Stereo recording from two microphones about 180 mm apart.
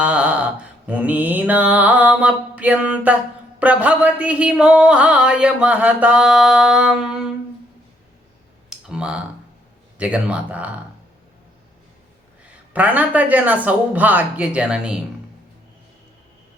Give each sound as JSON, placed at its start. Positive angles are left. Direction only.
{"t": 0.0, "sound": "mantra", "side_deg": -5}
{"t": 3.6, "sound": "speech", "side_deg": -5}
{"t": 8.7, "sound": "speech", "side_deg": -5}
{"t": 12.7, "sound": "speech", "side_deg": -10}